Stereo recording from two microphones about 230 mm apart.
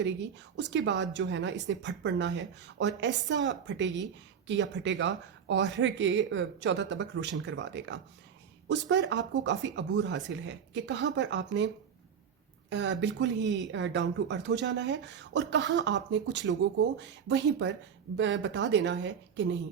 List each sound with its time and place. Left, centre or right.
0.0 s a woman's voice: right
12.7 s a woman's voice: right